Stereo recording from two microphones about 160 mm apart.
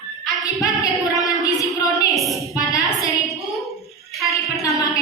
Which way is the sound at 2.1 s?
Centre (ahead or behind).